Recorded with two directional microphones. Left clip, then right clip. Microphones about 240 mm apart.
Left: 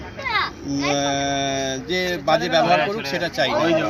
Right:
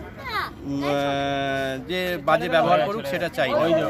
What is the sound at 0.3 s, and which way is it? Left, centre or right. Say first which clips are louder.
Children playing: left 6 dB; right.